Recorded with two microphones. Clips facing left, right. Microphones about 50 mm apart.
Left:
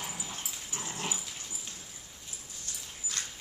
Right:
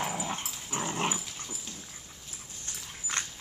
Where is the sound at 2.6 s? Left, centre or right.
Right.